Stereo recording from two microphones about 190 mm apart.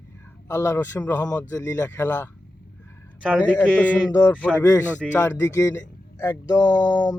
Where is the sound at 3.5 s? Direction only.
5° left (ahead or behind).